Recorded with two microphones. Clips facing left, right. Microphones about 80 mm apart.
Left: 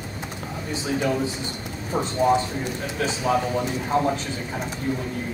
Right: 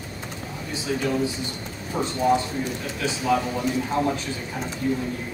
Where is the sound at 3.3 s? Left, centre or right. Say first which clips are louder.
Even; left.